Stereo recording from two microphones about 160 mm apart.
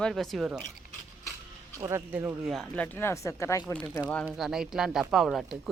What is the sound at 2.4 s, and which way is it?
Speech, centre (ahead or behind).